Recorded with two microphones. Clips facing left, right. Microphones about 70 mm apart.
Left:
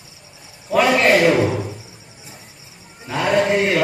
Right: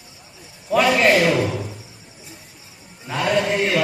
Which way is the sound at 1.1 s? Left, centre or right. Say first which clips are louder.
Left 2 dB; left.